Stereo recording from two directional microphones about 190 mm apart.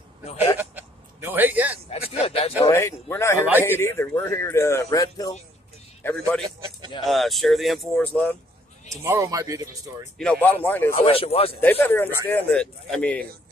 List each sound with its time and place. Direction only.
0.6 s a sound: 10° right (ahead or behind)
1.9 s speech: 30° left (ahead or behind)
2.7 s speech: 15° left (ahead or behind)
3.4 s speech: 10° right (ahead or behind)
3.7 s speech: 10° left (ahead or behind)
6.0 s speech: 5° left (ahead or behind)
9.0 s speech: 15° right (ahead or behind)
10.1 s speech: 5° left (ahead or behind)
11.0 s speech: 30° left (ahead or behind)
11.6 s speech: 10° left (ahead or behind)